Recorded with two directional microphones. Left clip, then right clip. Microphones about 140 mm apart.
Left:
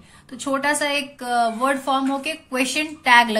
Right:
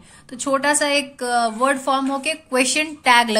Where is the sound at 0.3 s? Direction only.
30° right (ahead or behind).